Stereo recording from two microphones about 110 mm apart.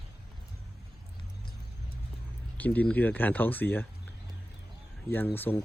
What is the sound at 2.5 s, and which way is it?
Speech, 15° left (ahead or behind).